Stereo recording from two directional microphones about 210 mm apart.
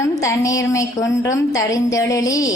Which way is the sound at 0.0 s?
15° left (ahead or behind).